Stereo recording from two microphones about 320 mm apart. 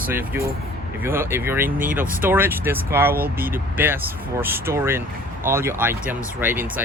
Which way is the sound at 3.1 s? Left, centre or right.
Right.